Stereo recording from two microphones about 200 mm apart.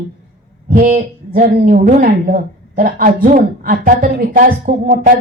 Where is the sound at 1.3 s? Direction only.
45° right (ahead or behind).